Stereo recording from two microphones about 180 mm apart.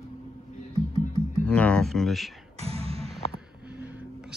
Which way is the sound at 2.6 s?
35° right (ahead or behind).